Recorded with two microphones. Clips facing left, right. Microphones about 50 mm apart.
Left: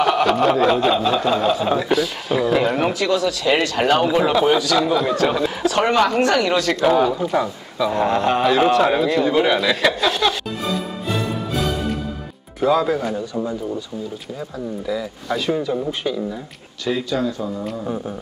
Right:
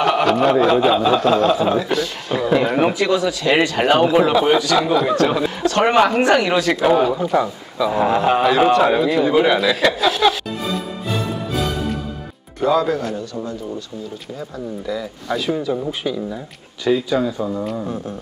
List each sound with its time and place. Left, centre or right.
0.0 s a sound: centre
0.7 s a man's voice: centre
5.9 s a man's voice: centre
12.5 s a man's voice: centre
14.9 s a man's voice: centre
16.9 s speech: centre
17.6 s a sound: centre